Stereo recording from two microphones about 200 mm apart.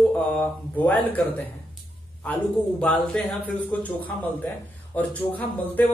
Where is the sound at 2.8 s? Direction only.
5° left (ahead or behind).